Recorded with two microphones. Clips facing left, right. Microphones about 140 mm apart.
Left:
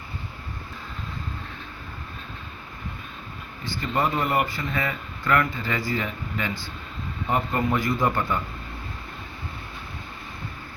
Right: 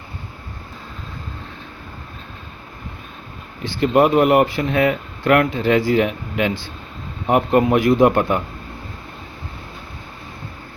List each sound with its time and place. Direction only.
3.6 s speech: 65° right (ahead or behind)